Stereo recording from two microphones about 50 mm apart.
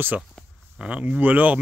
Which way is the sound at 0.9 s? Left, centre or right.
Right.